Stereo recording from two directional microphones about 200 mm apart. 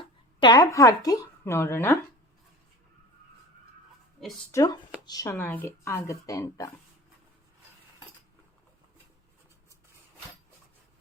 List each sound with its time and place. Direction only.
0.0 s speech: 25° left (ahead or behind)
4.5 s speech: 20° left (ahead or behind)